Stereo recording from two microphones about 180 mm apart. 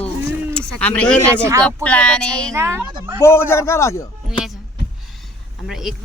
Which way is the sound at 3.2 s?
15° left (ahead or behind).